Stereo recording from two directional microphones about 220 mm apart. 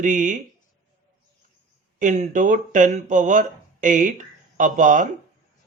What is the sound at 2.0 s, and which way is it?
Speech, 35° right (ahead or behind).